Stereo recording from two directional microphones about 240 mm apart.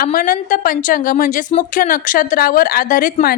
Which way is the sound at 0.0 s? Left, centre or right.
Left.